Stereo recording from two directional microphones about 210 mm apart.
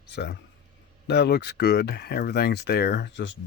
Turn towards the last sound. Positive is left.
turn(degrees=60)  # may be behind; listen again after turning